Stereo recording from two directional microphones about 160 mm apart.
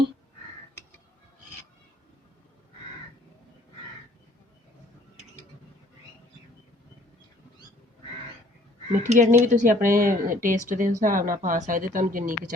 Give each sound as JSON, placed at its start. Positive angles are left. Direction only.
{"t": 9.0, "sound": "speech", "side_deg": -45}